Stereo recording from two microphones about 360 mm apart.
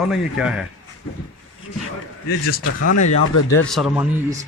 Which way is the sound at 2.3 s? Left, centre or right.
Left.